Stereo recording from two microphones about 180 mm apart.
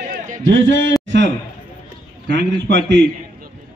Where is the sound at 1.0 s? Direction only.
90° right.